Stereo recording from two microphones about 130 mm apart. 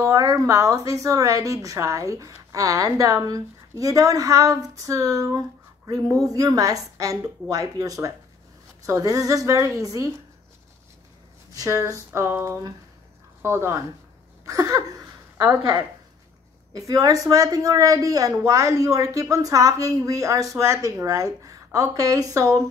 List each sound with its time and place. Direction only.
0.0 s a woman's voice: 25° right (ahead or behind)
11.5 s a woman's voice: 25° right (ahead or behind)
16.7 s a woman's voice: 25° right (ahead or behind)